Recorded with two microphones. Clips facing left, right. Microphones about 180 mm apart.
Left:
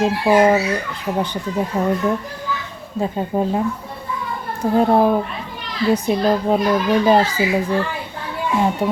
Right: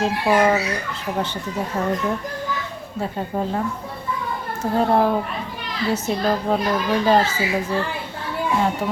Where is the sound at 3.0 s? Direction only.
15° left (ahead or behind).